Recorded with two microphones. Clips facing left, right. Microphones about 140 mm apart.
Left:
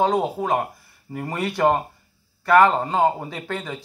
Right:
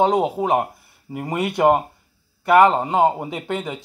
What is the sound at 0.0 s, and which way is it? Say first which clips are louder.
A man's voice: right 3 dB; 20° right (ahead or behind).